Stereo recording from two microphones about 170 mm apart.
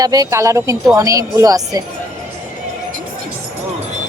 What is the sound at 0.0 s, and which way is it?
A woman's voice, 20° right (ahead or behind).